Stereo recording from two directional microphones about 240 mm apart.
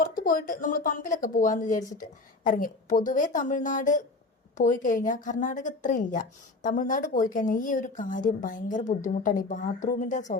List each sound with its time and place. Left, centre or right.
0.0 s a woman's voice: left